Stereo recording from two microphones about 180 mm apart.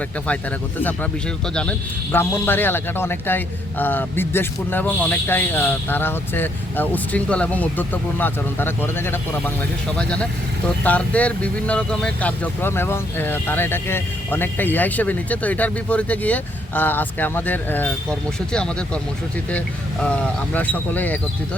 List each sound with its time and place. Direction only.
2.1 s speech: 10° left (ahead or behind)